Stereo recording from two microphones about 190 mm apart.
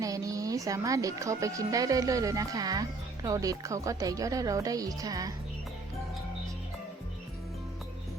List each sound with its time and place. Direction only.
0.0 s speech: 20° right (ahead or behind)